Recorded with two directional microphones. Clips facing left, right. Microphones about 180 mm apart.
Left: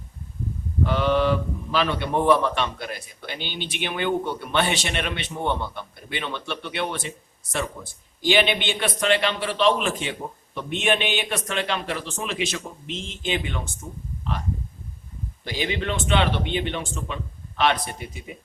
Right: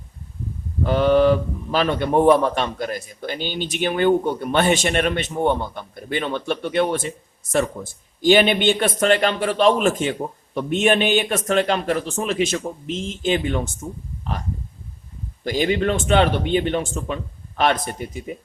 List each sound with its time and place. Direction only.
0.9 s a man's voice: 45° right (ahead or behind)
15.4 s a man's voice: 45° right (ahead or behind)